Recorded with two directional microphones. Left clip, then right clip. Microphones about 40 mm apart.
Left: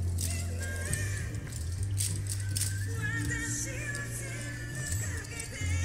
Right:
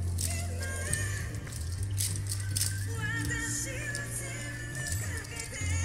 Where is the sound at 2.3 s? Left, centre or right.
Left.